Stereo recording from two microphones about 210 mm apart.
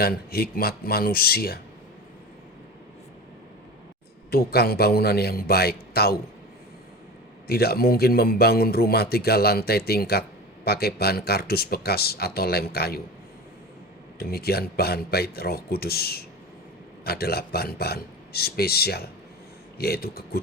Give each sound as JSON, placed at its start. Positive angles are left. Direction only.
{"t": 0.0, "sound": "a man's voice", "side_deg": 45}
{"t": 4.3, "sound": "a man's voice", "side_deg": 50}
{"t": 7.4, "sound": "a man's voice", "side_deg": 50}
{"t": 14.2, "sound": "a man's voice", "side_deg": 45}